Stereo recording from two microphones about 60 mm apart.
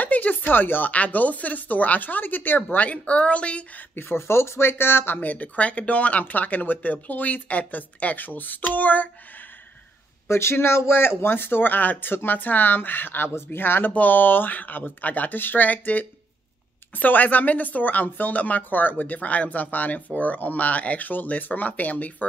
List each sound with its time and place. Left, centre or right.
0.0 s speech: left
3.9 s speech: left
10.2 s speech: left